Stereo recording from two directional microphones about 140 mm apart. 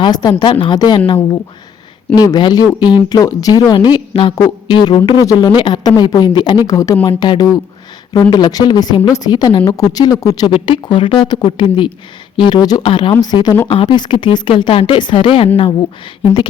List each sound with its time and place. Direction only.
0.0 s a woman's voice: 30° left (ahead or behind)
10.4 s a woman's voice: 35° left (ahead or behind)